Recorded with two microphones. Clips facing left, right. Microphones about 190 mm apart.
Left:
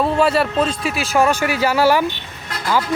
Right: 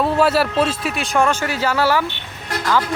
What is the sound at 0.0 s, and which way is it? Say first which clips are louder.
Speech: even; centre (ahead or behind).